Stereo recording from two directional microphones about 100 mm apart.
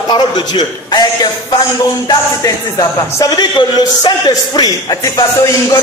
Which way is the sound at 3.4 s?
50° left (ahead or behind).